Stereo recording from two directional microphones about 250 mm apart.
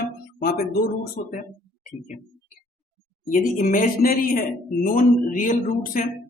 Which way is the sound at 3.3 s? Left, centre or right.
Left.